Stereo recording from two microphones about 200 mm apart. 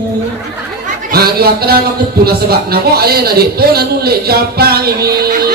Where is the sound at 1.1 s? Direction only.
50° right (ahead or behind).